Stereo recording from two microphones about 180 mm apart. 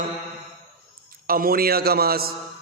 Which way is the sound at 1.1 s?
55° right (ahead or behind).